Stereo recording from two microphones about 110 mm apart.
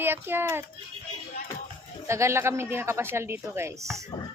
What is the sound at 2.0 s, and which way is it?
Speech, 25° right (ahead or behind).